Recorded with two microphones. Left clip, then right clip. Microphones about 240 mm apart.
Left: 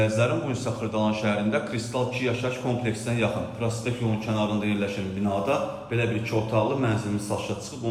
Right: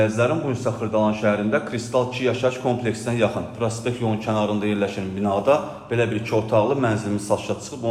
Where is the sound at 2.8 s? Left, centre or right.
Right.